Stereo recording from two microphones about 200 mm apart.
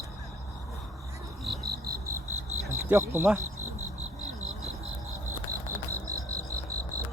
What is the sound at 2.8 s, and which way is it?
Speech, 10° right (ahead or behind).